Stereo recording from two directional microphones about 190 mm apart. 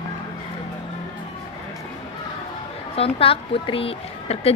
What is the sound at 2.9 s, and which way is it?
Speech, 30° left (ahead or behind).